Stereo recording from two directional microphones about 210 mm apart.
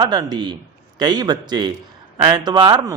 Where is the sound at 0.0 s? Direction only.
20° right (ahead or behind).